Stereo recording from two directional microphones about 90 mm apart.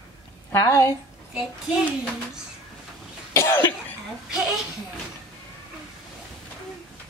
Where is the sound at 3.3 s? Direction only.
25° left (ahead or behind).